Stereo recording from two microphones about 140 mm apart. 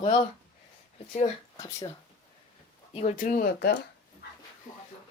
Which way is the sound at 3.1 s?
75° left (ahead or behind).